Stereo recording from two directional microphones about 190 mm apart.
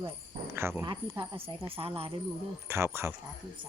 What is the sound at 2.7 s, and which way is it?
Speech, 15° right (ahead or behind).